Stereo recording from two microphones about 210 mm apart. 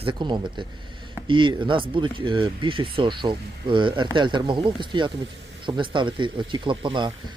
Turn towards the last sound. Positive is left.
turn(degrees=-20)  # may be behind; listen again after turning